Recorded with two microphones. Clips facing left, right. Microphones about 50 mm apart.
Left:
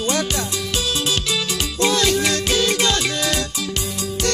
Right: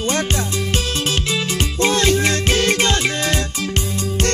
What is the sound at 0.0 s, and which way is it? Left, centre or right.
Music, right.